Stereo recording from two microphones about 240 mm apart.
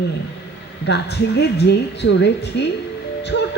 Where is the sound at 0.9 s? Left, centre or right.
Left.